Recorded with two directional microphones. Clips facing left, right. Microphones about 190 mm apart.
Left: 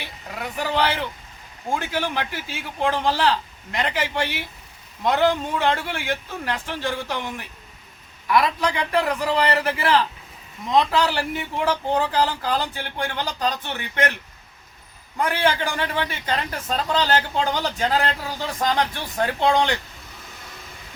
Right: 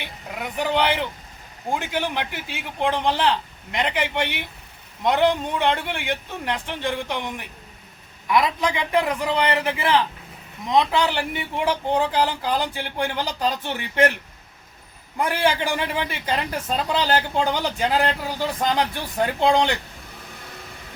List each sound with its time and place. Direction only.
0.0 s a man's voice: 15° right (ahead or behind)
9.2 s a man's voice: centre (ahead or behind)
9.6 s a man's voice: 20° right (ahead or behind)
15.2 s a man's voice: 15° right (ahead or behind)